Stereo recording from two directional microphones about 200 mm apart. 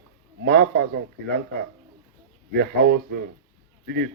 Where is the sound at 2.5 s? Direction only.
55° right (ahead or behind).